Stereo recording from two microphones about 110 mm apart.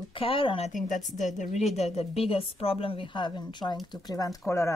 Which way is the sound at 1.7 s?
75° left (ahead or behind).